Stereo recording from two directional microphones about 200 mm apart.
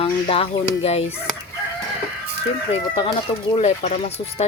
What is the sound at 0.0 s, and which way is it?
Speech, 30° left (ahead or behind).